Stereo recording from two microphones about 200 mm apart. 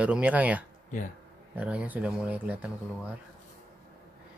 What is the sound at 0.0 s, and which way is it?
Speech, 5° right (ahead or behind).